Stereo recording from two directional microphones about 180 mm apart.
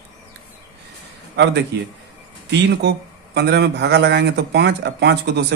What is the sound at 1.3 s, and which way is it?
A man's voice, 70° right (ahead or behind).